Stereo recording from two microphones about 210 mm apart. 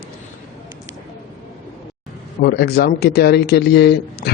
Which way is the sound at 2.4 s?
50° left (ahead or behind).